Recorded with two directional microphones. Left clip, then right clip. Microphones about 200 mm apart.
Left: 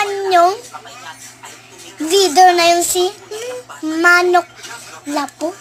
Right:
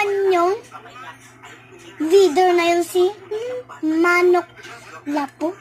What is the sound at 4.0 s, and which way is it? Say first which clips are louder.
Speech: left 5 dB; 15° left (ahead or behind).